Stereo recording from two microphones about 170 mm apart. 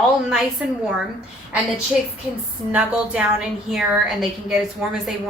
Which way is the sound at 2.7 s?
10° right (ahead or behind).